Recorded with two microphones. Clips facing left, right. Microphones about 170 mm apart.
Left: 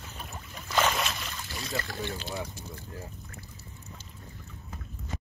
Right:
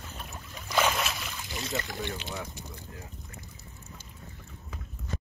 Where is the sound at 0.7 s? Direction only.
10° right (ahead or behind).